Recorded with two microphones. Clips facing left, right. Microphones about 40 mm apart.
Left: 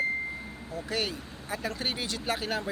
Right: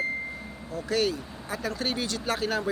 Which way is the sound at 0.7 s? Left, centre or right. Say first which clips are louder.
Right 6 dB; centre.